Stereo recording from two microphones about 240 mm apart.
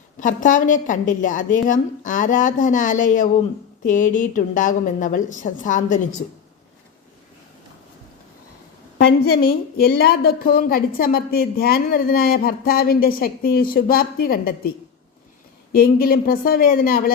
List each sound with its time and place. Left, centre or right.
0.2 s a woman's voice: left
9.0 s a woman's voice: left
15.7 s a woman's voice: left